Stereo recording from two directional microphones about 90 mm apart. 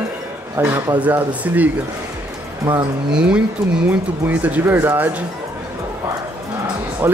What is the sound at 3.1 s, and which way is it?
Speech, 10° right (ahead or behind).